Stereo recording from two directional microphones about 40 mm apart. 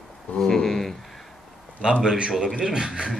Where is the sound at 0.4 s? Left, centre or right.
Centre.